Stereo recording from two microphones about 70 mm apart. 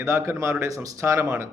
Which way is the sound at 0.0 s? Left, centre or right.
Right.